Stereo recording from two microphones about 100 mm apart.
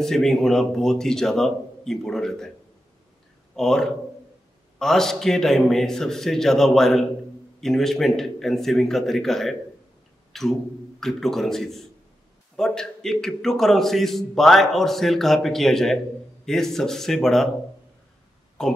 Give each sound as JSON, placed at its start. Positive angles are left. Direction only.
{"t": 0.0, "sound": "a man's voice", "side_deg": 5}
{"t": 3.5, "sound": "a man's voice", "side_deg": 5}
{"t": 10.3, "sound": "a sound", "side_deg": 5}
{"t": 11.0, "sound": "a man's voice", "side_deg": 5}
{"t": 18.6, "sound": "speech", "side_deg": 5}